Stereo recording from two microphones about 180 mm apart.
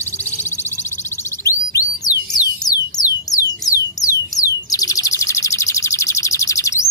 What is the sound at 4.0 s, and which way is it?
Bird, 20° left (ahead or behind).